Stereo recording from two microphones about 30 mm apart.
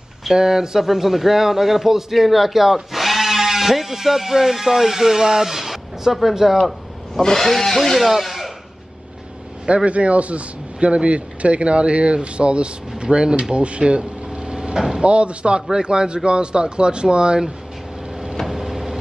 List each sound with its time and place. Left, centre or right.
0.3 s a man's voice: centre
7.2 s speech: centre
8.2 s a sound: centre
9.8 s speech: right
15.0 s speech: right
15.7 s a man's voice: right
18.5 s vehicle: centre